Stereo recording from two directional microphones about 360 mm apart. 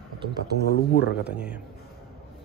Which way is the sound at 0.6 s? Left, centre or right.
Left.